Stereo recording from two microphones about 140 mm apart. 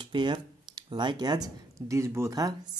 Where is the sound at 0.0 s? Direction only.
35° right (ahead or behind).